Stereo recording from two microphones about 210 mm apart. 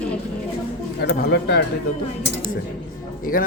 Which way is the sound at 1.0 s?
55° left (ahead or behind).